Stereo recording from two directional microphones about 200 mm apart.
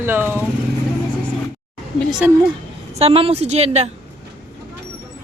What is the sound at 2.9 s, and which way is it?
Speech, 30° right (ahead or behind).